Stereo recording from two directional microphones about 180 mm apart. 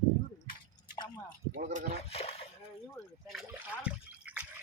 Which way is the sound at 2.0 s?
35° left (ahead or behind).